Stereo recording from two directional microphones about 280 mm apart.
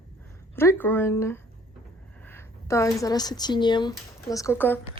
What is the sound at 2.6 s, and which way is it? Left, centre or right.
A woman's voice, centre.